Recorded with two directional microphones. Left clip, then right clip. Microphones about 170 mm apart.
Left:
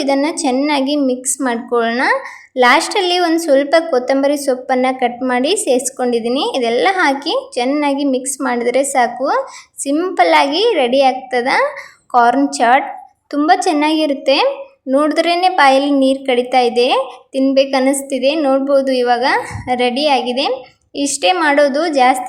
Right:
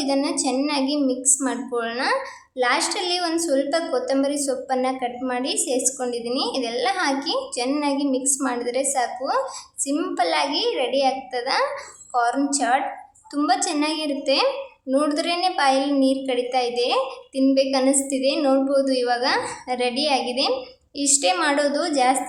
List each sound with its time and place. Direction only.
0.0 s a woman's voice: 35° left (ahead or behind)